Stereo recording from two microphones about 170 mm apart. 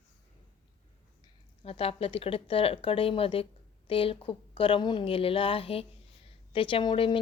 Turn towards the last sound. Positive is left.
turn(degrees=30)  # may be behind; listen again after turning